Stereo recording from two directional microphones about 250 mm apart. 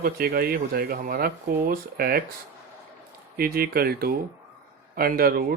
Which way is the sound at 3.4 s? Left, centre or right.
Right.